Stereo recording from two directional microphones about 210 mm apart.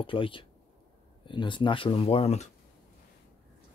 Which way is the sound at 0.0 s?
25° left (ahead or behind).